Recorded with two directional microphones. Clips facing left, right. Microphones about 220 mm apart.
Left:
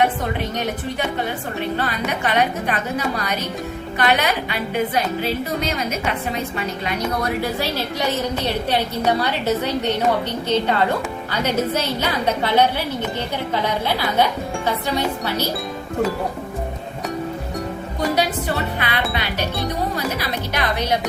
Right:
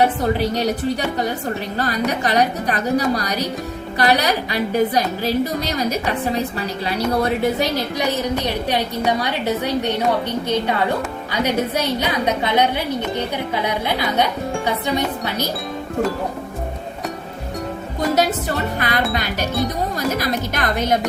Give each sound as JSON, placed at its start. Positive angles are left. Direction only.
{"t": 0.0, "sound": "a woman's voice", "side_deg": -35}
{"t": 7.6, "sound": "a woman's voice", "side_deg": -15}
{"t": 18.1, "sound": "music", "side_deg": -45}
{"t": 19.1, "sound": "speech", "side_deg": -45}
{"t": 20.1, "sound": "music", "side_deg": -45}